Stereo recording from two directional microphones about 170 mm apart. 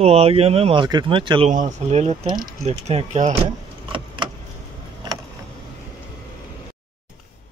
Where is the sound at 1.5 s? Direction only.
45° right (ahead or behind).